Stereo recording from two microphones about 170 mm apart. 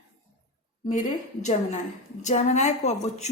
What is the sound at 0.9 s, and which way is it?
A woman's voice, 45° left (ahead or behind).